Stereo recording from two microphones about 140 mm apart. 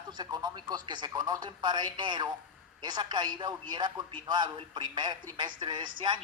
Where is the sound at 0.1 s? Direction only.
30° right (ahead or behind).